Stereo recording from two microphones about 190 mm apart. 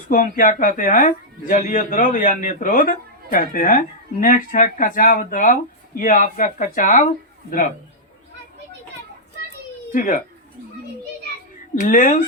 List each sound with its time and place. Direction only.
0.1 s speech: 45° left (ahead or behind)
9.9 s speech: 45° left (ahead or behind)
11.7 s speech: 45° left (ahead or behind)